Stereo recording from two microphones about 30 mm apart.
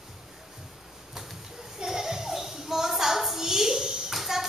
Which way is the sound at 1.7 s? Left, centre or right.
Centre.